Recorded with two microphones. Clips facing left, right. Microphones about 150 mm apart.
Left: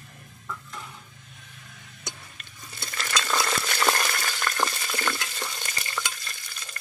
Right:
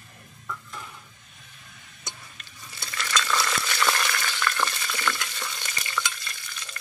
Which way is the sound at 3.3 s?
35° left (ahead or behind).